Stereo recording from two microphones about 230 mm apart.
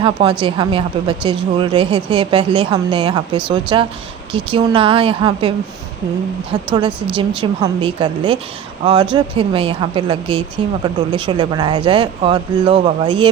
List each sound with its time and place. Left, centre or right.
0.0 s speech: right
7.2 s speech: right